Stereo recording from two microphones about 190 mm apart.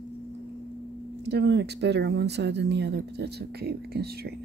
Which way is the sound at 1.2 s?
60° right (ahead or behind).